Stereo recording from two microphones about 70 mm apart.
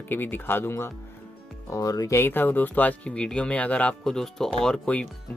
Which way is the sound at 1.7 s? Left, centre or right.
Left.